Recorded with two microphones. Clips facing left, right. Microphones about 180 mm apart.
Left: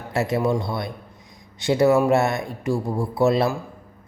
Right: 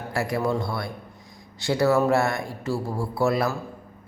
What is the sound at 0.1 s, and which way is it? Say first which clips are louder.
A man's voice: left 4 dB; 20° left (ahead or behind).